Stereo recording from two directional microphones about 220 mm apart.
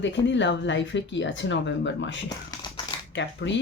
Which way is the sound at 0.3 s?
55° left (ahead or behind).